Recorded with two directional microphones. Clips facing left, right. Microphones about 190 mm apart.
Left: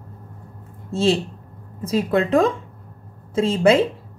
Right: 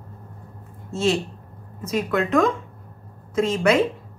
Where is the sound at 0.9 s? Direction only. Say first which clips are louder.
Left 3 dB; 30° left (ahead or behind).